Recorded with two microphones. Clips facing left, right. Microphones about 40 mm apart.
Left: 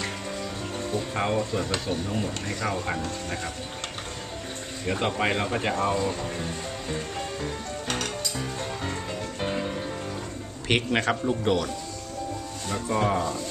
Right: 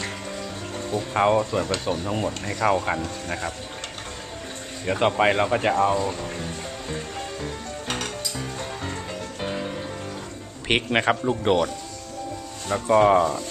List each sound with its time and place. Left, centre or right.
0.0 s music: centre
1.1 s speech: right
1.9 s speech: right
2.6 s speech: right
4.9 s music: right; by 9.8 s centre
10.7 s speech: right
12.8 s speech: right